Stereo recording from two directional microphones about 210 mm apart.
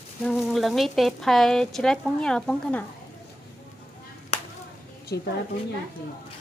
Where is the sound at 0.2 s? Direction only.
Centre (ahead or behind).